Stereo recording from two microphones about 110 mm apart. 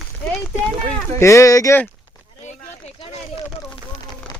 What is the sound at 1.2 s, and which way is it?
Speech, 25° left (ahead or behind).